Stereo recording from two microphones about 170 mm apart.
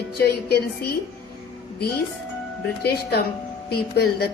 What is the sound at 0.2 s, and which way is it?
Speech, 65° left (ahead or behind).